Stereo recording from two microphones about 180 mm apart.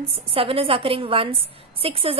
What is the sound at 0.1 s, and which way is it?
A woman's voice, 30° right (ahead or behind).